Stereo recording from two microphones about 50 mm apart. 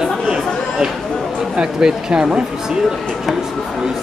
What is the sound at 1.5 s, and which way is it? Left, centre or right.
Speech, centre.